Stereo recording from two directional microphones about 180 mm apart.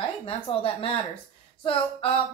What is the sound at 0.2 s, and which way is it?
A woman's voice, 30° left (ahead or behind).